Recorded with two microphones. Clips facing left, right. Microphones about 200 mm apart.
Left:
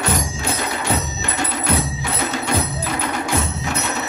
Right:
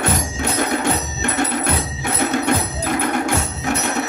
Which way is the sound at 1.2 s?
55° right (ahead or behind).